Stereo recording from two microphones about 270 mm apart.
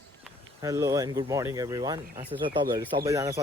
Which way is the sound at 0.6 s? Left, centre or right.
Centre.